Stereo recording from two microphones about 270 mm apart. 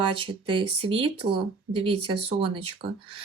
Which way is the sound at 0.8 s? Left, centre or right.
Centre.